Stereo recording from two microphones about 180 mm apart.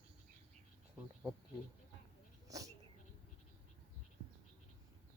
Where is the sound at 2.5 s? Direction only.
20° right (ahead or behind).